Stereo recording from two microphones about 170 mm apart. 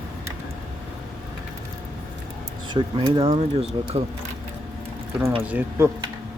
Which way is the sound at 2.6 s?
25° right (ahead or behind).